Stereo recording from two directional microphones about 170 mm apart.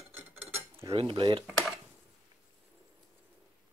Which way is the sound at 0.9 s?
30° right (ahead or behind).